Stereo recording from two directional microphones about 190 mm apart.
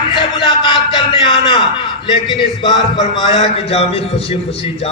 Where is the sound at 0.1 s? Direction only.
25° left (ahead or behind).